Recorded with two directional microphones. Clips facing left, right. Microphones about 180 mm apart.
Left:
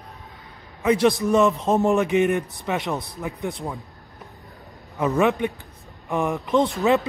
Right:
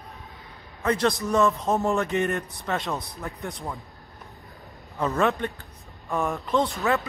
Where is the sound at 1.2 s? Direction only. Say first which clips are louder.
Left 4 dB; 20° left (ahead or behind).